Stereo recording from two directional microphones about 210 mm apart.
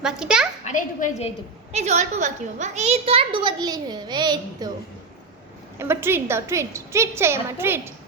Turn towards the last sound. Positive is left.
turn(degrees=-10)  # may be behind; listen again after turning